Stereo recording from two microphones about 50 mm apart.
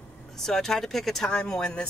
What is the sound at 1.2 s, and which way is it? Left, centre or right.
Speech, centre.